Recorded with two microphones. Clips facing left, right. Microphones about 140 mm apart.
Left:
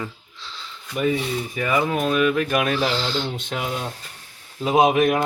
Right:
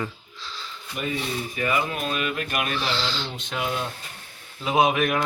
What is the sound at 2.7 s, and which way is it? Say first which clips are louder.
Speech: left 5 dB; 45° left (ahead or behind).